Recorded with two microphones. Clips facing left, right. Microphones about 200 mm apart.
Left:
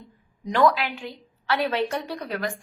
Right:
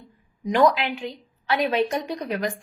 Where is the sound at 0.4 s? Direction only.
15° right (ahead or behind).